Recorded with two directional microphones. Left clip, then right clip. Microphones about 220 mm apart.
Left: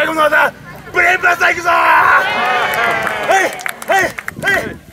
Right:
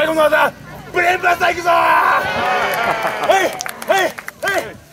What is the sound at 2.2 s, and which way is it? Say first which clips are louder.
Run: left 3 dB; 50° left (ahead or behind).